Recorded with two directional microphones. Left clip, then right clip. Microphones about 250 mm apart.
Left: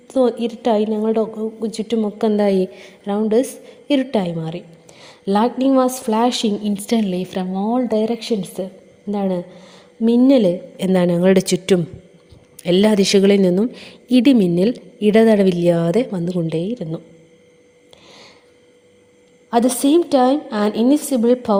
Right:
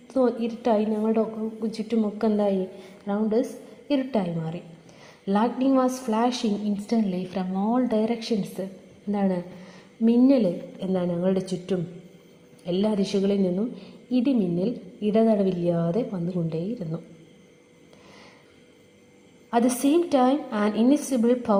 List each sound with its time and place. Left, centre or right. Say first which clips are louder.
0.1 s a woman's voice: left 6 dB; left
19.5 s a woman's voice: left 7 dB; left